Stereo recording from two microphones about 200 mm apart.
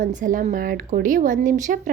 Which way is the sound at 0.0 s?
40° right (ahead or behind).